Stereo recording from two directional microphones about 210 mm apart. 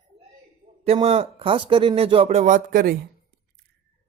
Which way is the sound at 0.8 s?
30° right (ahead or behind).